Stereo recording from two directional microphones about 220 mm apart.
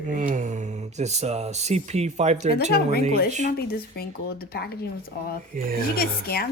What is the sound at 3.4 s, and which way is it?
Speech, 45° left (ahead or behind).